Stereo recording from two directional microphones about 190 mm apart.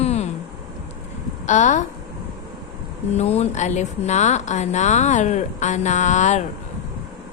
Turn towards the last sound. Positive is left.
turn(degrees=40)  # may be behind; listen again after turning